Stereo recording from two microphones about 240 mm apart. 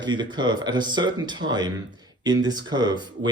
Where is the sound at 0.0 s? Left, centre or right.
Centre.